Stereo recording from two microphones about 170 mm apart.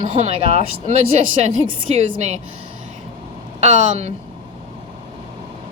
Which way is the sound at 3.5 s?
45° right (ahead or behind).